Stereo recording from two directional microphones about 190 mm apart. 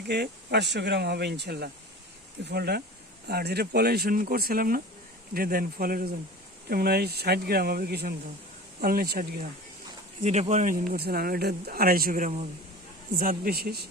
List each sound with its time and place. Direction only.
0.1 s speech: 60° right (ahead or behind)
10.2 s speech: 35° right (ahead or behind); by 13.8 s 55° right (ahead or behind)